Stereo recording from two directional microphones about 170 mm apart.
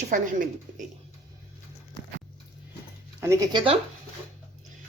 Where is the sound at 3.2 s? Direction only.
15° right (ahead or behind).